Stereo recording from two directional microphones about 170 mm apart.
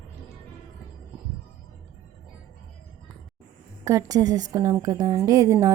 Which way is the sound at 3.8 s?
20° right (ahead or behind).